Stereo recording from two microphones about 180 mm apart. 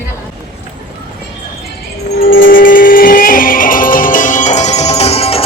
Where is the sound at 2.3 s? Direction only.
50° left (ahead or behind); by 5.4 s 35° left (ahead or behind).